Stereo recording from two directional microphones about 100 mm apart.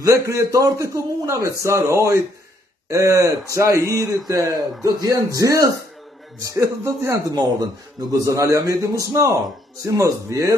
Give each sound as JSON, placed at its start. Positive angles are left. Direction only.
{"t": 0.0, "sound": "a man's voice", "side_deg": -30}